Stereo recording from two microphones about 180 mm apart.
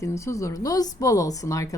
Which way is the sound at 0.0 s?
15° left (ahead or behind).